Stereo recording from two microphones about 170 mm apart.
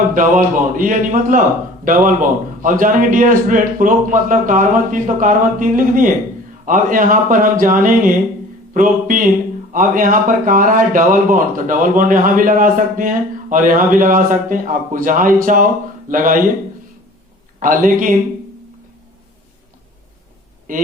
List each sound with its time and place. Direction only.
0.1 s a man's voice: 50° right (ahead or behind)
17.6 s a man's voice: 50° right (ahead or behind)
20.7 s a man's voice: 55° right (ahead or behind)